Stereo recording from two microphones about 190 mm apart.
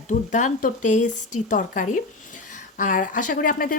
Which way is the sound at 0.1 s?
40° left (ahead or behind).